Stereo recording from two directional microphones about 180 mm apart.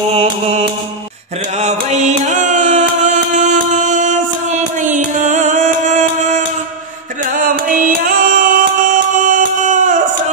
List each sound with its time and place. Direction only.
0.1 s mantra: 35° right (ahead or behind)
1.6 s music: 40° right (ahead or behind)